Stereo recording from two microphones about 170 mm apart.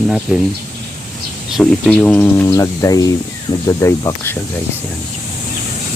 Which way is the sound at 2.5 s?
20° left (ahead or behind).